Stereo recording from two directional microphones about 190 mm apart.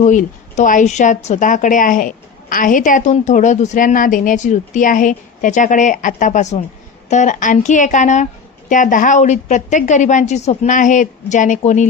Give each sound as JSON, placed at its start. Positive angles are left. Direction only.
{"t": 0.0, "sound": "a woman's voice", "side_deg": 40}